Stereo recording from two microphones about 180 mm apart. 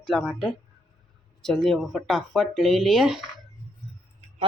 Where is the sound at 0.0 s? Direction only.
Centre (ahead or behind).